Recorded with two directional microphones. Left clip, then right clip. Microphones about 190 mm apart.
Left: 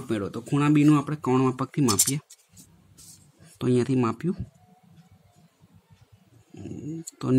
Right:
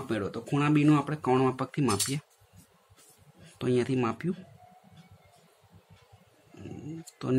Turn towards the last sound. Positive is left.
turn(degrees=35)  # may be behind; listen again after turning